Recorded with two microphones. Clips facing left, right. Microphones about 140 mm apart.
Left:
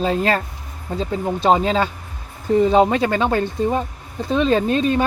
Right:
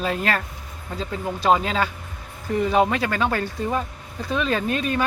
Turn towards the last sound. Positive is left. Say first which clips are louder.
# left 6 dB
turn(degrees=30)  # may be behind; listen again after turning